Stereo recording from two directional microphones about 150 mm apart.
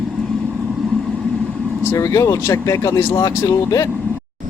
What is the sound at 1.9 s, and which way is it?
Speech, 20° left (ahead or behind).